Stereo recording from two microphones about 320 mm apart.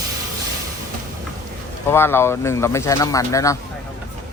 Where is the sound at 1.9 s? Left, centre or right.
Centre.